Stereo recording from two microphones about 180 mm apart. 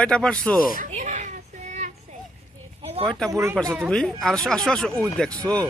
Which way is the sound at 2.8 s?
30° right (ahead or behind).